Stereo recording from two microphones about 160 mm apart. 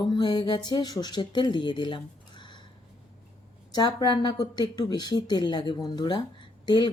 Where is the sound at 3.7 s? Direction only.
25° left (ahead or behind).